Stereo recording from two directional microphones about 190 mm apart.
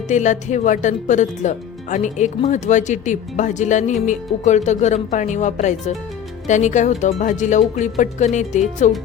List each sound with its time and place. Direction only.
0.1 s speech: 40° left (ahead or behind)